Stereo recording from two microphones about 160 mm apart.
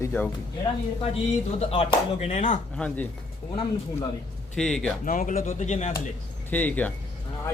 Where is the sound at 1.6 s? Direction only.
35° left (ahead or behind).